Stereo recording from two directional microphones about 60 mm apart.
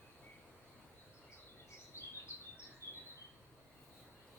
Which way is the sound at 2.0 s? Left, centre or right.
Left.